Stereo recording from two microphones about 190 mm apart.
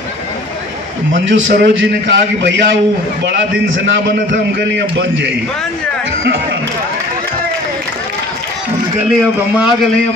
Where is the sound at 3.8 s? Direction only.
65° right (ahead or behind).